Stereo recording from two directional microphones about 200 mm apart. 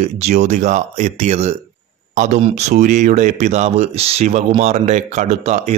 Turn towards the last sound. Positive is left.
turn(degrees=-35)  # may be behind; listen again after turning